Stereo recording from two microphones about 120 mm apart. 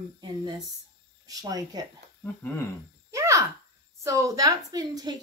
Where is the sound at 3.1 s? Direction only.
25° right (ahead or behind).